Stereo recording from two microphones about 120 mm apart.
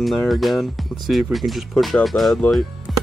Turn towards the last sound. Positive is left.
turn(degrees=0)  # may be behind; listen again after turning